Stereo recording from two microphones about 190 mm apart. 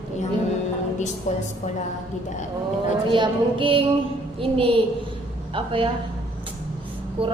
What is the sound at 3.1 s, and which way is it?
A woman's voice, 25° right (ahead or behind).